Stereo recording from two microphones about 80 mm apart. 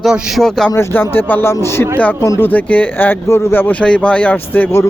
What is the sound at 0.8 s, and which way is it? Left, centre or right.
A man's voice, left.